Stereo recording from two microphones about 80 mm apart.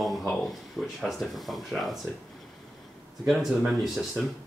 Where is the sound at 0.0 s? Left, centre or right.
Centre.